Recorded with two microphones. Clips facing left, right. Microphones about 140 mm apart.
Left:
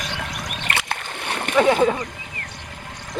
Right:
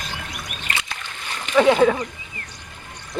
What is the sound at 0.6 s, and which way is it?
Splash, 60° left (ahead or behind).